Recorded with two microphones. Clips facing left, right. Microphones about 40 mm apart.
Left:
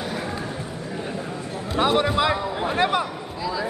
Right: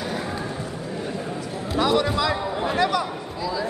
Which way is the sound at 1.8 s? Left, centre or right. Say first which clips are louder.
Left 1 dB; left.